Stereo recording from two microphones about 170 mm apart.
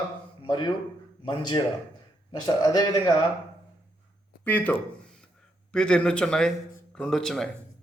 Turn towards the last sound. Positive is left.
turn(degrees=5)  # may be behind; listen again after turning